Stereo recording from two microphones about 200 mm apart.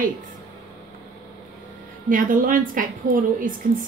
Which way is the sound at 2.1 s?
40° right (ahead or behind).